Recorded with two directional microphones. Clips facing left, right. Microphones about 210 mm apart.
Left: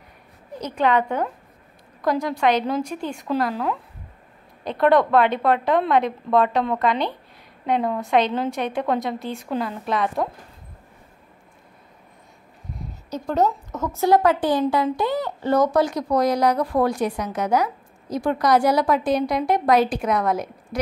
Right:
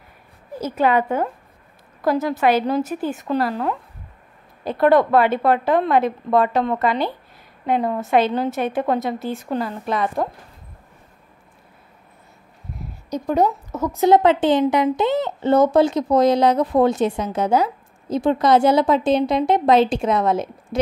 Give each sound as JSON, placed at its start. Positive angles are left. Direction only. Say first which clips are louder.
{"t": 0.6, "sound": "a woman's voice", "louder": "right 2 dB", "side_deg": -5}
{"t": 13.1, "sound": "a woman's voice", "louder": "right 2 dB", "side_deg": -10}